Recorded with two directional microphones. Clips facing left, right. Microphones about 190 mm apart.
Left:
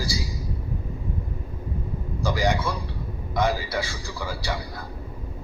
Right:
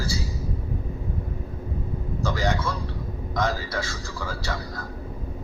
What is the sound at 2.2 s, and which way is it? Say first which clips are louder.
A man's voice: left 2 dB; 15° left (ahead or behind).